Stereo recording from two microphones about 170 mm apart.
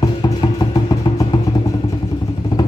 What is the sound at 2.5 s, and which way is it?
Vehicle, 25° left (ahead or behind).